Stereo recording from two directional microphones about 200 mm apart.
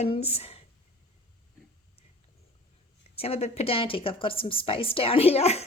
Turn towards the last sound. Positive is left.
turn(degrees=30)  # may be behind; listen again after turning